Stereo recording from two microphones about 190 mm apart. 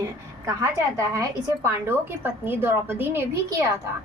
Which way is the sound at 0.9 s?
15° right (ahead or behind).